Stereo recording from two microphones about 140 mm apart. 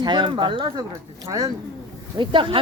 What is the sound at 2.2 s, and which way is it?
Speech, 35° right (ahead or behind).